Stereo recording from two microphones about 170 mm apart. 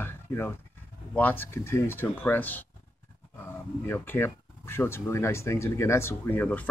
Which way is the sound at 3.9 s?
10° left (ahead or behind).